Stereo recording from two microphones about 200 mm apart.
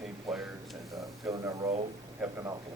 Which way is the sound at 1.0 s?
15° right (ahead or behind).